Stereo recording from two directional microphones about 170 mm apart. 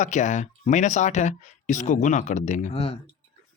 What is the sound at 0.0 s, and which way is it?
Speech, 45° left (ahead or behind).